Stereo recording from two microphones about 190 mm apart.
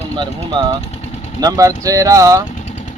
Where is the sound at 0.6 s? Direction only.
20° right (ahead or behind).